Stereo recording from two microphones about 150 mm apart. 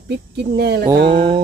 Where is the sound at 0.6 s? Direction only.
90° right.